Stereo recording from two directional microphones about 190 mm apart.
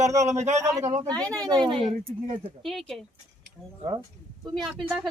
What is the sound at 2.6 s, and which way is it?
Speech, centre (ahead or behind).